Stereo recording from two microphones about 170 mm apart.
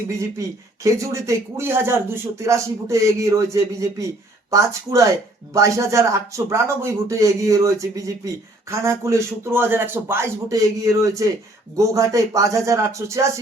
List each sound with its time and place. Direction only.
0.2 s a man's voice: 20° right (ahead or behind)